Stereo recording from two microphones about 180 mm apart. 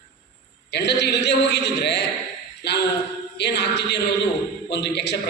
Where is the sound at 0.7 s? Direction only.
70° left (ahead or behind).